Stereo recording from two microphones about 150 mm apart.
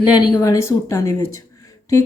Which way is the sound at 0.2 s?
25° left (ahead or behind).